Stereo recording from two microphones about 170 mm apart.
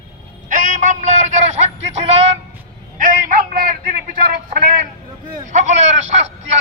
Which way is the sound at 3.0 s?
55° right (ahead or behind).